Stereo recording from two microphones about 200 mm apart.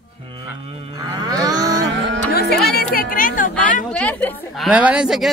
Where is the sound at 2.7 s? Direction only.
50° left (ahead or behind).